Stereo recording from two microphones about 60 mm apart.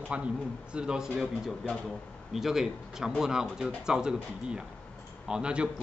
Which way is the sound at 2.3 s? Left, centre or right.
Centre.